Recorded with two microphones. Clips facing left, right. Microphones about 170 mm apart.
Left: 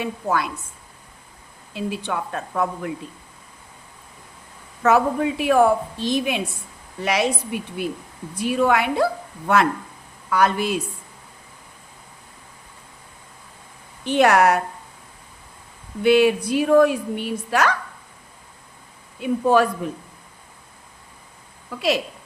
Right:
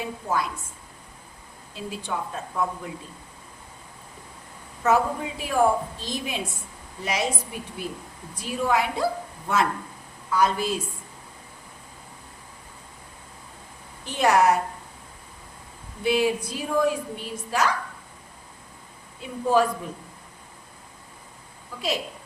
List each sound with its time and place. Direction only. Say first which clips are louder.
0.0 s a woman's voice: left 4 dB; 70° left (ahead or behind)
1.7 s a woman's voice: left 5 dB; 70° left (ahead or behind)
4.8 s a woman's voice: left 4 dB; 70° left (ahead or behind)
10.2 s a woman's voice: left 3 dB; 70° left (ahead or behind)
14.0 s a woman's voice: left 4 dB; 70° left (ahead or behind)
16.0 s a woman's voice: left 7 dB; 70° left (ahead or behind)
19.2 s a woman's voice: left 4 dB; 70° left (ahead or behind)
21.8 s a woman's voice: left 7 dB; 75° left (ahead or behind)